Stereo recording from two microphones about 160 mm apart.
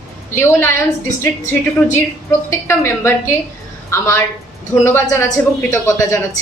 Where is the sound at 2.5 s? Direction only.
15° left (ahead or behind).